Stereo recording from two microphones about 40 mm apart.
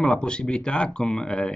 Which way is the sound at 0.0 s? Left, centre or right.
Left.